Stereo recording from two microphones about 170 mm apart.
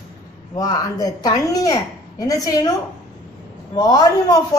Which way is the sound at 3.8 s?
20° left (ahead or behind).